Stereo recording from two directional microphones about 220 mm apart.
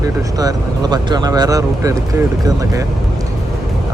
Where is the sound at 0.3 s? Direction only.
15° right (ahead or behind).